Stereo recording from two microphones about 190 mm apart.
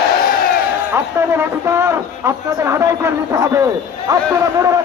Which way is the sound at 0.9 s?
10° right (ahead or behind).